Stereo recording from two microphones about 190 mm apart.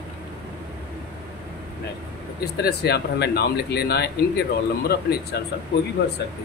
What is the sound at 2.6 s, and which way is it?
Speech, 60° left (ahead or behind).